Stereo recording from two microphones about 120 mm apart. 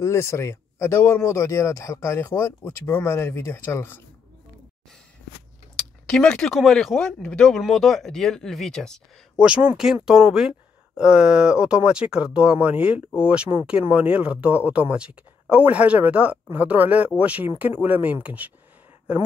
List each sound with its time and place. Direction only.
0.0 s speech: 20° left (ahead or behind)
6.0 s speech: 5° left (ahead or behind)
9.4 s speech: 10° right (ahead or behind)